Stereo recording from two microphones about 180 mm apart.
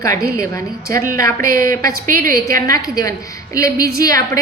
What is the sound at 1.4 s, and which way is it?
Speech, 50° right (ahead or behind).